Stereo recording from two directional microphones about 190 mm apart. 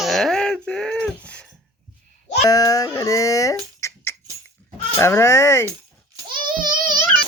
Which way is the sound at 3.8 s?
15° left (ahead or behind).